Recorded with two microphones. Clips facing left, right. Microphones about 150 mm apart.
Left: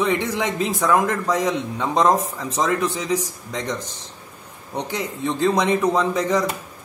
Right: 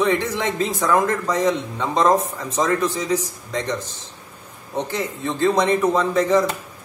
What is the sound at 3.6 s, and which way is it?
Speech, 10° left (ahead or behind).